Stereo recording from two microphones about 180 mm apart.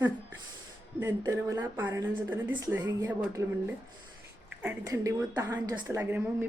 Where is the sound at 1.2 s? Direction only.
15° right (ahead or behind).